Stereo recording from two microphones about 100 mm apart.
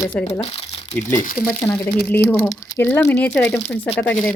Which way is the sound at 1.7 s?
15° left (ahead or behind).